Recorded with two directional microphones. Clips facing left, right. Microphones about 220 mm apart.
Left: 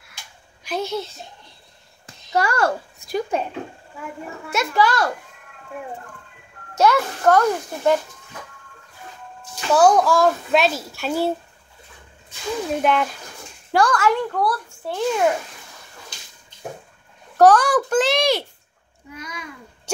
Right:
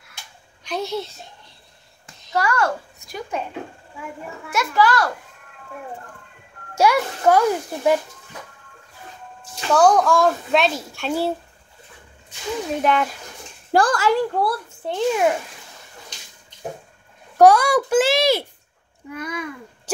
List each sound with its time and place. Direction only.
0.7 s a child's voice: centre (ahead or behind)
2.3 s a woman's voice: 30° left (ahead or behind)
4.5 s a child's voice: 25° left (ahead or behind)
6.7 s a child's voice: 10° right (ahead or behind)
9.7 s a child's voice: 5° left (ahead or behind)
12.8 s a child's voice: centre (ahead or behind)
13.7 s speech: 35° right (ahead or behind); by 15.2 s 20° right (ahead or behind)
17.4 s a child's voice: 10° right (ahead or behind)
19.1 s a child's voice: 55° right (ahead or behind)